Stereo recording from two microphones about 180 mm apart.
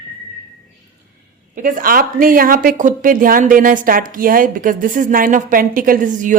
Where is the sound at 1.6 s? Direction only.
50° right (ahead or behind).